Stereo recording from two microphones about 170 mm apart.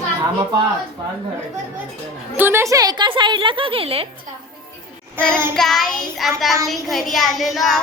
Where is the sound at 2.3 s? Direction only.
15° right (ahead or behind); by 4.1 s 35° right (ahead or behind).